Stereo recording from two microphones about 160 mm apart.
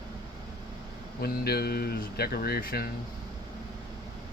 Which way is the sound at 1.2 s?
75° left (ahead or behind).